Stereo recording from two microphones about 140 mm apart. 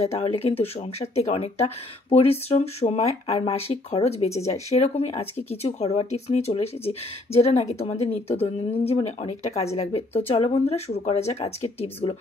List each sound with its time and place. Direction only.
0.0 s speech: 45° left (ahead or behind)